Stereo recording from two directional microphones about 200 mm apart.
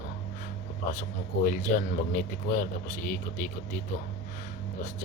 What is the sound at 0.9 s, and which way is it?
A man's voice, 40° left (ahead or behind).